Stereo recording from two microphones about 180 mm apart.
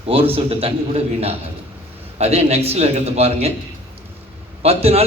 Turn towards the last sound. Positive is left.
turn(degrees=-35)  # may be behind; listen again after turning